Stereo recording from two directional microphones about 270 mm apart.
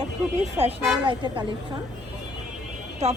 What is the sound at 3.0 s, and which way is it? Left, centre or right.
Speech, right.